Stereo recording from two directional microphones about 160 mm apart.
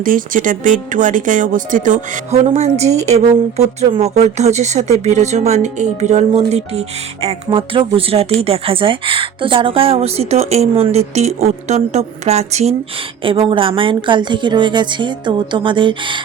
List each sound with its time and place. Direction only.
0.0 s speech: 60° right (ahead or behind); by 16.2 s 30° right (ahead or behind)